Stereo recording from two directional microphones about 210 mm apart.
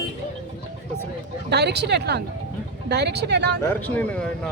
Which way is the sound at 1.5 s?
55° right (ahead or behind).